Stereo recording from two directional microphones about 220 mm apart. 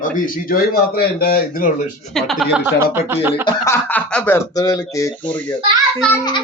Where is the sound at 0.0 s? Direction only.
40° left (ahead or behind).